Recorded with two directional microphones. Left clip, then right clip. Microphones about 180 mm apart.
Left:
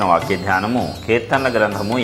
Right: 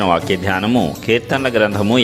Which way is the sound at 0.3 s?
50° right (ahead or behind).